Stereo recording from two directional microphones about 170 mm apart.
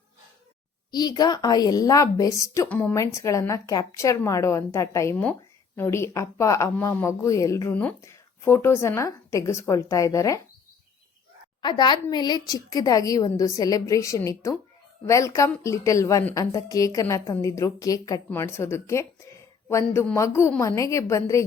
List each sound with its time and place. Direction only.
0.9 s a woman's voice: 25° left (ahead or behind)
11.6 s a woman's voice: 25° left (ahead or behind)